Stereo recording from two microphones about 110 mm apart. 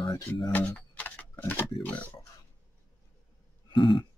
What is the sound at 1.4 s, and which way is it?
Speech, 15° left (ahead or behind).